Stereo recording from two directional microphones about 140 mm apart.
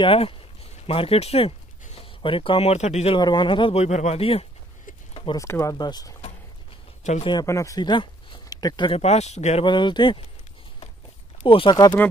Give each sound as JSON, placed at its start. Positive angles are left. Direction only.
{"t": 0.0, "sound": "speech", "side_deg": 40}
{"t": 3.2, "sound": "speech", "side_deg": 35}
{"t": 5.1, "sound": "a sound", "side_deg": 40}
{"t": 5.4, "sound": "speech", "side_deg": 20}
{"t": 7.0, "sound": "a sound", "side_deg": 60}
{"t": 7.4, "sound": "speech", "side_deg": 20}
{"t": 8.9, "sound": "speech", "side_deg": 50}
{"t": 9.7, "sound": "speech", "side_deg": 35}
{"t": 11.4, "sound": "speech", "side_deg": 35}